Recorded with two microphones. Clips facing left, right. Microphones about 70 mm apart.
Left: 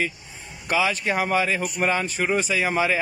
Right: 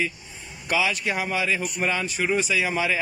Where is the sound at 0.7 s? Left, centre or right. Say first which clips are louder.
Left 2 dB; left.